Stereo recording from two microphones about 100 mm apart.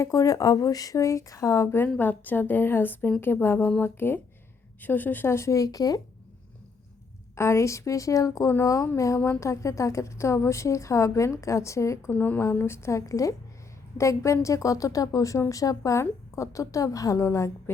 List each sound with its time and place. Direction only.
0.0 s a woman's voice: 35° left (ahead or behind)
7.3 s a woman's voice: 30° left (ahead or behind)
12.1 s a woman's voice: 15° left (ahead or behind)